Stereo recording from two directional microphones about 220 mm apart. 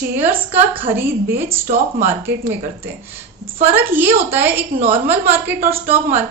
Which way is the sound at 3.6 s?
10° right (ahead or behind).